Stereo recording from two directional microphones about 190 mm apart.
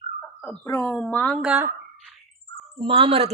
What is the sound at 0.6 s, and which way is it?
Speech, 15° left (ahead or behind).